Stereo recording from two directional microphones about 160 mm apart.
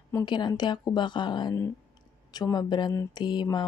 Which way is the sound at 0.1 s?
30° left (ahead or behind).